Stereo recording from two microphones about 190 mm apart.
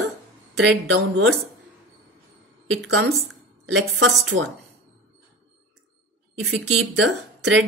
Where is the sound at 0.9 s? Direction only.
65° right (ahead or behind).